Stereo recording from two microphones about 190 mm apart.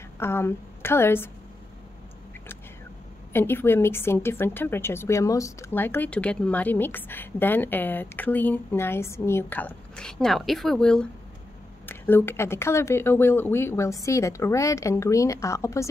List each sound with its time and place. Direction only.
0.2 s a woman's voice: 15° left (ahead or behind)
3.3 s a woman's voice: 10° left (ahead or behind)